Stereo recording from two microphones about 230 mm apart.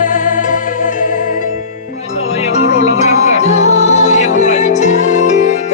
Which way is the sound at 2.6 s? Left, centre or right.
Right.